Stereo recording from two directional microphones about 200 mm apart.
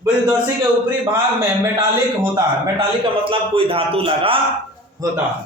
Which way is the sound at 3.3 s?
25° right (ahead or behind).